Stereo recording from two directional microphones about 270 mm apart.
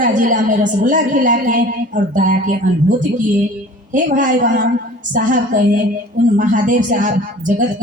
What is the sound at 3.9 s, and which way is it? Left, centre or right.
A man's voice, right.